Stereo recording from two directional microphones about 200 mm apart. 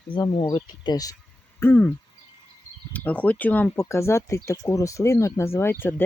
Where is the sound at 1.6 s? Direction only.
10° left (ahead or behind).